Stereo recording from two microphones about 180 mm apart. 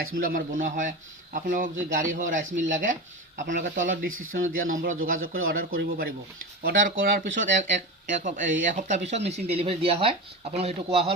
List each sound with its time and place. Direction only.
0.2 s a man's voice: 50° right (ahead or behind)
7.0 s a man's voice: 45° right (ahead or behind)